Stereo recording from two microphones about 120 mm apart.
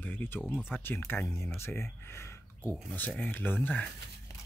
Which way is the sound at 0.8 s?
15° left (ahead or behind).